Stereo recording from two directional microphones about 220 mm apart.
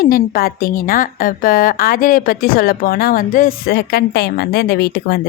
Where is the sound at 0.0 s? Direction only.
40° left (ahead or behind).